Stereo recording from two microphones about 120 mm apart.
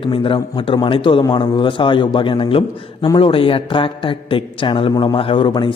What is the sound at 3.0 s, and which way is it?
Speech, 35° left (ahead or behind).